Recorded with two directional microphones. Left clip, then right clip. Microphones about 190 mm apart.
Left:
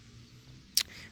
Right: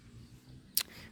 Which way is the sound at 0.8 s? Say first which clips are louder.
Left 6 dB; 20° right (ahead or behind).